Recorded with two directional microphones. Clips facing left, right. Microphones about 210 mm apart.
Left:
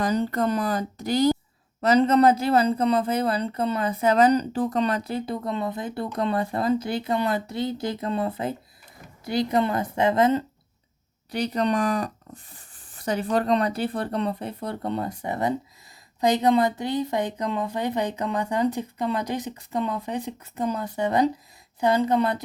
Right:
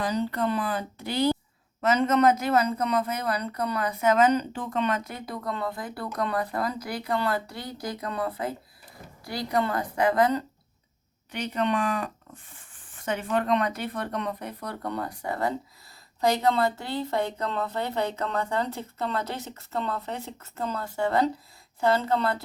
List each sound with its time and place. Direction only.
0.0 s speech: 45° left (ahead or behind); by 10.4 s 25° left (ahead or behind)
11.3 s speech: 35° left (ahead or behind); by 22.4 s 15° left (ahead or behind)